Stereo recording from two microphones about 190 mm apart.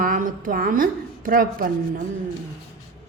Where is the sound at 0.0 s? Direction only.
45° right (ahead or behind).